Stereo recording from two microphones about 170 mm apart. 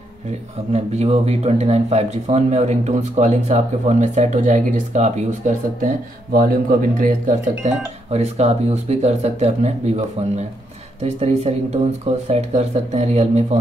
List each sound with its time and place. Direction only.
0.7 s speech: 40° right (ahead or behind)